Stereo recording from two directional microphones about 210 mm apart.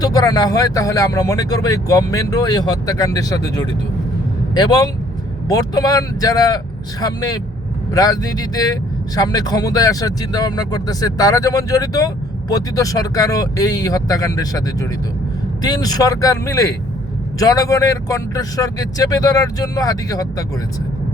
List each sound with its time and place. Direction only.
0.0 s a man's voice: 20° left (ahead or behind)